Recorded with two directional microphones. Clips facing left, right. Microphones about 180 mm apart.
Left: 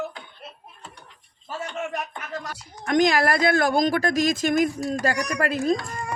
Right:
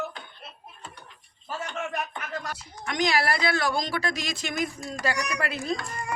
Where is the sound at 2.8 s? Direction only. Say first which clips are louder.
Left 6 dB; 50° left (ahead or behind).